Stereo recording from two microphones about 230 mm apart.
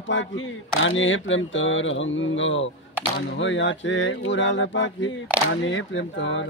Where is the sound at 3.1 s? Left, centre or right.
Left.